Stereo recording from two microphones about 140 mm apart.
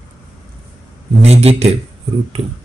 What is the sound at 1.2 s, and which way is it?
Speech, 50° right (ahead or behind).